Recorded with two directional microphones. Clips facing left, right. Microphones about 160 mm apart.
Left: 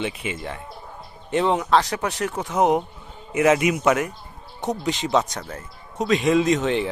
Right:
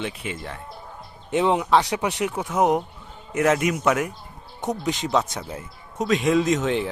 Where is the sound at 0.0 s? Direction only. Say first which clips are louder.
Left 2 dB; 5° left (ahead or behind).